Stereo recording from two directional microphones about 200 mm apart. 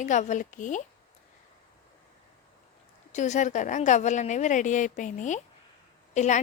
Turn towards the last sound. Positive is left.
turn(degrees=35)  # may be behind; listen again after turning